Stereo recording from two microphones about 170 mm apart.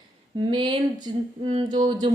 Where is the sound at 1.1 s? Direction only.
30° right (ahead or behind).